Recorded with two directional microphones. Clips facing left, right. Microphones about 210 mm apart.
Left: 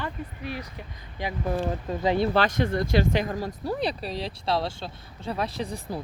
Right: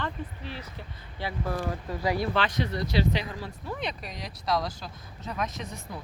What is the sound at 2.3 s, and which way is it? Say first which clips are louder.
Speech: left 5 dB; 45° left (ahead or behind).